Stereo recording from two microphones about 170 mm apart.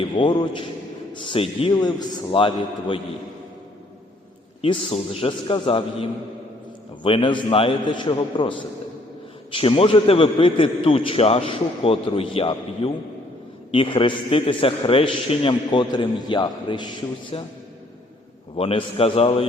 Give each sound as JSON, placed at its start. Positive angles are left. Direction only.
{"t": 0.1, "sound": "a man's voice", "side_deg": 25}
{"t": 4.6, "sound": "a man's voice", "side_deg": 35}
{"t": 18.5, "sound": "a man's voice", "side_deg": 35}